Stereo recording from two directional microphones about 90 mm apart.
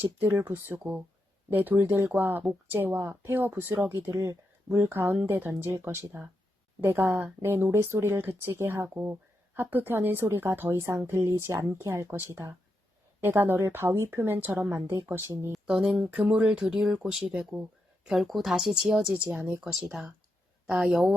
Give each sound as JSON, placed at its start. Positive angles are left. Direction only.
{"t": 0.0, "sound": "speech", "side_deg": -25}
{"t": 13.2, "sound": "speech", "side_deg": -25}
{"t": 15.6, "sound": "speech", "side_deg": -10}